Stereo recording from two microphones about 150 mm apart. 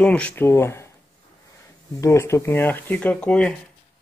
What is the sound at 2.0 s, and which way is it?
Speech, 20° left (ahead or behind).